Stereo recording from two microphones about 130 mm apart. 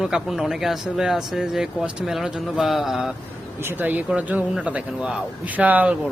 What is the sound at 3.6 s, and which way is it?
Speech, 15° right (ahead or behind).